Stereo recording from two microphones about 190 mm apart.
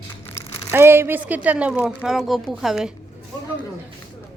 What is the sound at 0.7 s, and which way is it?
A woman's voice, 10° right (ahead or behind).